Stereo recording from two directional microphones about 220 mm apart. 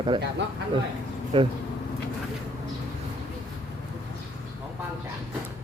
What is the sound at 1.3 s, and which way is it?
Speech, 25° right (ahead or behind).